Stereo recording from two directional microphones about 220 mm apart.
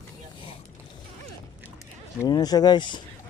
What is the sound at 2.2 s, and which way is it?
Speech, 20° left (ahead or behind).